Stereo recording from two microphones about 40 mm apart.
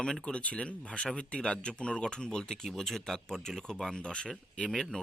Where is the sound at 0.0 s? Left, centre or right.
Centre.